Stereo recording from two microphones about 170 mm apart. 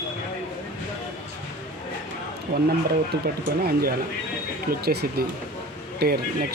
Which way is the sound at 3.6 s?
65° right (ahead or behind).